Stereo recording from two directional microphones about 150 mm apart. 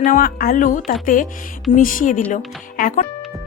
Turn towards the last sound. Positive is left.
turn(degrees=60)  # may be behind; listen again after turning